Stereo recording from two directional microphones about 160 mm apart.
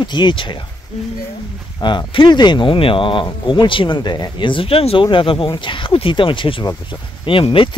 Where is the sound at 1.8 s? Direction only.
30° left (ahead or behind).